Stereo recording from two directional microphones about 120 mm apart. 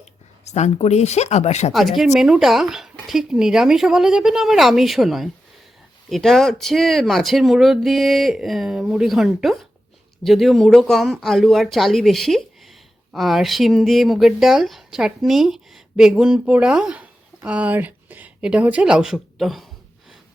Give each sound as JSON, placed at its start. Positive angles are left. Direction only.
{"t": 0.4, "sound": "speech", "side_deg": 70}
{"t": 1.7, "sound": "speech", "side_deg": 0}